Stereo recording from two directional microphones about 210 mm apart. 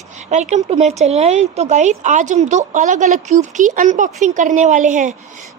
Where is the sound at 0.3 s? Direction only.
35° right (ahead or behind).